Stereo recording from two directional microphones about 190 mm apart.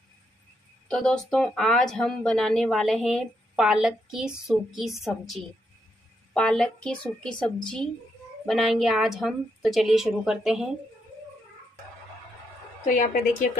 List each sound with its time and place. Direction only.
0.8 s speech: 5° left (ahead or behind)
12.9 s a woman's voice: 40° left (ahead or behind)